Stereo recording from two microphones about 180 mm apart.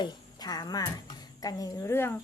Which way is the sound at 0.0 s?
20° left (ahead or behind).